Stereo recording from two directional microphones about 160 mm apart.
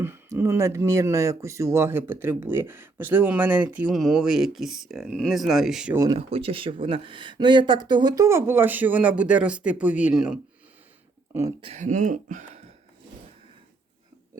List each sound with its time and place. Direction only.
0.0 s speech: 15° right (ahead or behind)
6.1 s speech: 35° right (ahead or behind); by 10.4 s 5° right (ahead or behind)
11.6 s speech: 45° right (ahead or behind)